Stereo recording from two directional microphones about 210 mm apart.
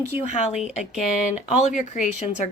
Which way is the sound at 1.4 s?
35° left (ahead or behind).